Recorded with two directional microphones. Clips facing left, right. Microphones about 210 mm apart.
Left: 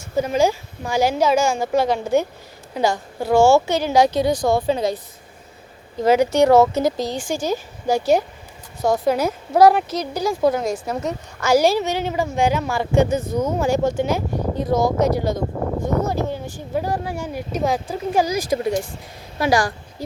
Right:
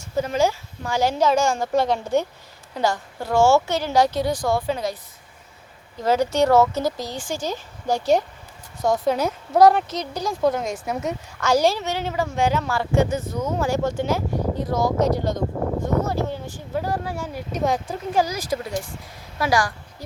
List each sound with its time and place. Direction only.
0.2 s speech: 15° left (ahead or behind)
6.0 s speech: 10° left (ahead or behind)
17.5 s speech: centre (ahead or behind)
19.4 s a woman's voice: 25° left (ahead or behind)